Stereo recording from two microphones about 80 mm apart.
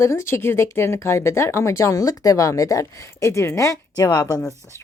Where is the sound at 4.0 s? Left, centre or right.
Left.